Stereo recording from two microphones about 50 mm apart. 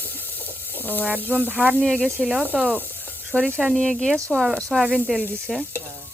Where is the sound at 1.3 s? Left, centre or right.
Right.